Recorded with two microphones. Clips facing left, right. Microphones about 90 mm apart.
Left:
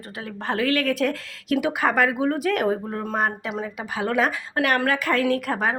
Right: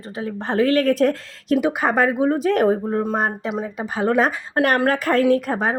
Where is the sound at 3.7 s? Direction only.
35° right (ahead or behind).